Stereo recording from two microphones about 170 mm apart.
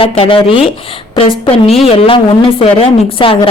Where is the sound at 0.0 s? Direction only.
30° left (ahead or behind).